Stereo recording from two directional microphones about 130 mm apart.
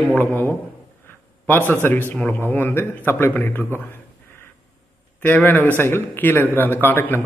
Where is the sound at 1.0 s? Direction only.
15° left (ahead or behind).